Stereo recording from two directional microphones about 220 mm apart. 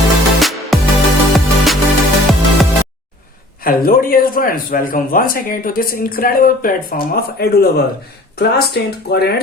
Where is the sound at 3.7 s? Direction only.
40° left (ahead or behind).